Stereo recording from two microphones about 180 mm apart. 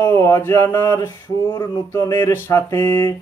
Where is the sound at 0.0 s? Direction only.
15° left (ahead or behind).